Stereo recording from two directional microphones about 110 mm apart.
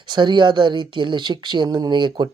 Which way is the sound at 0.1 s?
45° right (ahead or behind).